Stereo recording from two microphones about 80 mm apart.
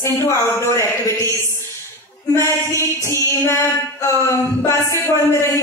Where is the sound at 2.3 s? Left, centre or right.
Left.